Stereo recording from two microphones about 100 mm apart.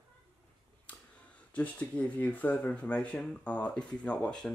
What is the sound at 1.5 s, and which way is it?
Speech, 15° left (ahead or behind).